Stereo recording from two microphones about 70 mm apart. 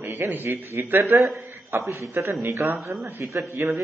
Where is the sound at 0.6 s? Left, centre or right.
Right.